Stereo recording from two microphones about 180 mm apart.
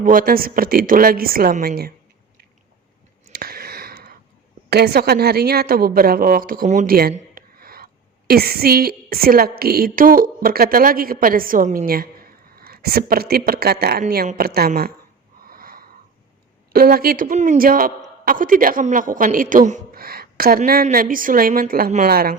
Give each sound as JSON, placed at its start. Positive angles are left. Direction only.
{"t": 0.0, "sound": "a woman's voice", "side_deg": -50}
{"t": 3.3, "sound": "a sound", "side_deg": -55}
{"t": 4.7, "sound": "a woman's voice", "side_deg": -65}
{"t": 7.1, "sound": "a sound", "side_deg": -55}
{"t": 8.3, "sound": "a woman's voice", "side_deg": -60}
{"t": 15.4, "sound": "wheeze", "side_deg": -55}
{"t": 16.7, "sound": "a woman's voice", "side_deg": -55}